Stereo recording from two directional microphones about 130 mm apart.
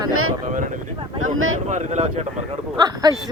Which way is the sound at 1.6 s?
70° right (ahead or behind).